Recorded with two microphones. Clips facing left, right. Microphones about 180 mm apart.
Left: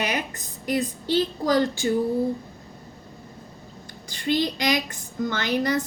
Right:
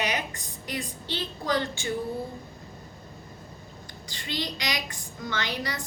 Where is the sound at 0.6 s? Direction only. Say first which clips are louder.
Left 10 dB; 45° left (ahead or behind).